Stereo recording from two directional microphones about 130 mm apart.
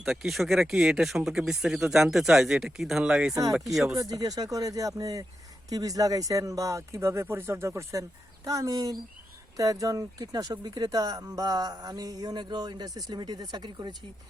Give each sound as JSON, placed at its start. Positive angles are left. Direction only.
{"t": 0.0, "sound": "speech", "side_deg": -5}
{"t": 3.9, "sound": "speech", "side_deg": -25}